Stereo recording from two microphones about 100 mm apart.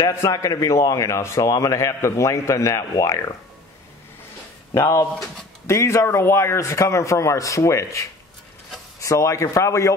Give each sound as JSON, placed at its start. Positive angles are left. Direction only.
{"t": 0.0, "sound": "a man's voice", "side_deg": 30}
{"t": 4.7, "sound": "a man's voice", "side_deg": 30}